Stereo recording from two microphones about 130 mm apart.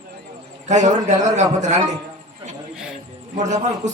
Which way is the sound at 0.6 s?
65° right (ahead or behind).